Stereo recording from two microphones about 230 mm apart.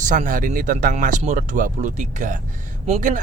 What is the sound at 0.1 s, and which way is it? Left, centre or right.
Speech, right.